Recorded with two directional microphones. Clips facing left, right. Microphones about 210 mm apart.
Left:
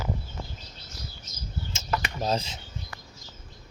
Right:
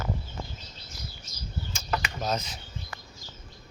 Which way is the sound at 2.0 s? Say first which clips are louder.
Left 3 dB; 30° left (ahead or behind).